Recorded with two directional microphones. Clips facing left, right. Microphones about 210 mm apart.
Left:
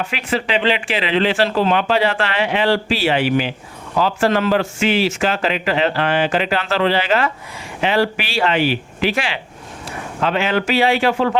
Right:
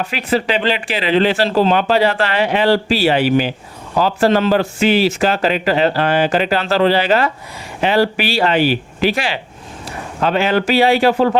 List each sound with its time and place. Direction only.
0.1 s speech: 35° right (ahead or behind)